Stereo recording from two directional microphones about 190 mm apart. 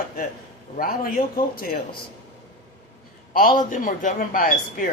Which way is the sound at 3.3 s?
50° left (ahead or behind).